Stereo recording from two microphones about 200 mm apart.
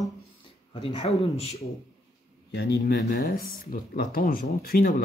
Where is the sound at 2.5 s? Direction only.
55° left (ahead or behind).